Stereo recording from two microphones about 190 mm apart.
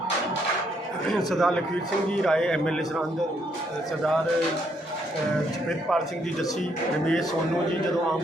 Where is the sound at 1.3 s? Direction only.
Centre (ahead or behind).